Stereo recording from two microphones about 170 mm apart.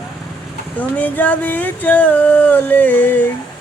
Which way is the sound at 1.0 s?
10° left (ahead or behind).